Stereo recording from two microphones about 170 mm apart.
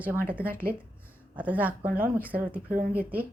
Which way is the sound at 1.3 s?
10° right (ahead or behind).